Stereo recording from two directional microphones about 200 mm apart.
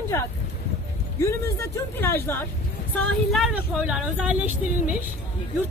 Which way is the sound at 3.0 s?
Centre (ahead or behind).